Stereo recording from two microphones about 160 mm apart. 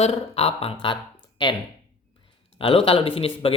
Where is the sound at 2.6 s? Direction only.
35° left (ahead or behind).